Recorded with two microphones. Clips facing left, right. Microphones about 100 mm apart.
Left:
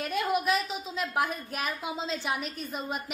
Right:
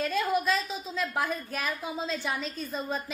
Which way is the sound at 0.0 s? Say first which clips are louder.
Right 1 dB; 20° left (ahead or behind).